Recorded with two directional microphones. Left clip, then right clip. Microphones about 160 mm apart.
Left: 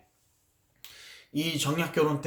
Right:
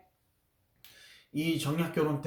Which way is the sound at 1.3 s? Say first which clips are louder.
Left 3 dB; 15° left (ahead or behind).